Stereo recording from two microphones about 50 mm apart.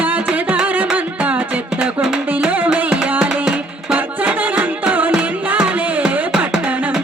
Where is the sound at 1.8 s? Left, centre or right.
Centre.